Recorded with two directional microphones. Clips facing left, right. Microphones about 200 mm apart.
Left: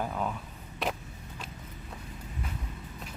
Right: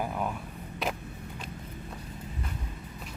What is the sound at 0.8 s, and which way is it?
Vehicle, centre (ahead or behind).